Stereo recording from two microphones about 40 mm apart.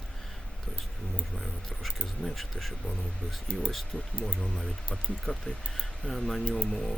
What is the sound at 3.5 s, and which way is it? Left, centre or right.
Speech, right.